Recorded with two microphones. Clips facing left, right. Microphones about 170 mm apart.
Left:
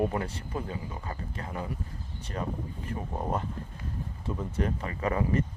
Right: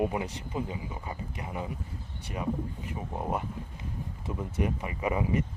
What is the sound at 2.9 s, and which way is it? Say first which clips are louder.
Speech: left 2 dB; 15° right (ahead or behind).